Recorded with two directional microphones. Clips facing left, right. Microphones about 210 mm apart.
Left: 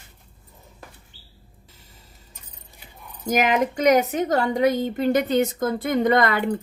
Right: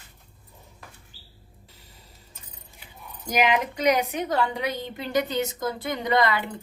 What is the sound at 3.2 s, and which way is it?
A woman's voice, 45° left (ahead or behind).